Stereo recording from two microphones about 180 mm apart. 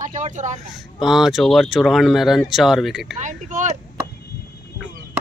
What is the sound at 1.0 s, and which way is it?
Speech, centre (ahead or behind).